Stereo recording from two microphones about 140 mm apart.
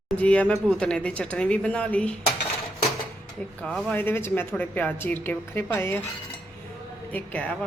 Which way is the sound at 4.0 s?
15° left (ahead or behind).